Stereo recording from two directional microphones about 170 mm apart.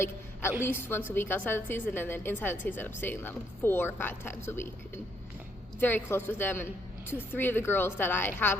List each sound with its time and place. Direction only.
0.6 s a woman's voice: 10° left (ahead or behind)
5.8 s a woman's voice: 15° left (ahead or behind)